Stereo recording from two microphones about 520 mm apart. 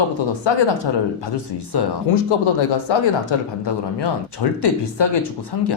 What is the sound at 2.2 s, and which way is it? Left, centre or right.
Speech, left.